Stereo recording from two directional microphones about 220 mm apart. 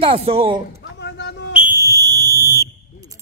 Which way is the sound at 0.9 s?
50° left (ahead or behind).